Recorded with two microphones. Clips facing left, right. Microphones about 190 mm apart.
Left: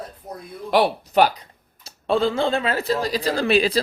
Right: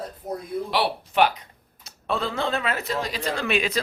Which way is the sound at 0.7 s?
40° left (ahead or behind).